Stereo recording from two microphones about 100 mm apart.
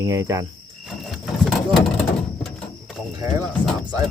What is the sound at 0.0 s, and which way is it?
Speech, 35° right (ahead or behind).